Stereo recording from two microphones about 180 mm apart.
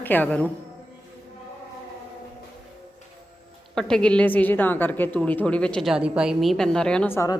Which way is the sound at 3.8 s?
5° left (ahead or behind).